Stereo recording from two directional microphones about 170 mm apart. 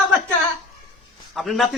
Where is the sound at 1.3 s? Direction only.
Centre (ahead or behind).